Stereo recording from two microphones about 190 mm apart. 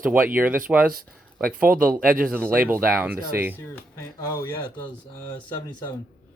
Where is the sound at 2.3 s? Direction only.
10° right (ahead or behind).